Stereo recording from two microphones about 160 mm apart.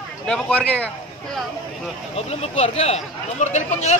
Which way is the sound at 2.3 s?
40° left (ahead or behind).